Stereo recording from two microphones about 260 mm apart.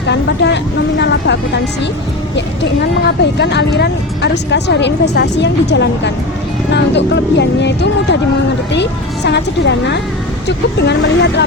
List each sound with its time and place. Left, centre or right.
0.1 s speech: left
3.3 s speech: left